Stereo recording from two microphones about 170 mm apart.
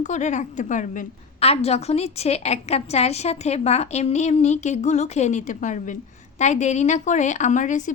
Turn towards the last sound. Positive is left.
turn(degrees=50)  # may be behind; listen again after turning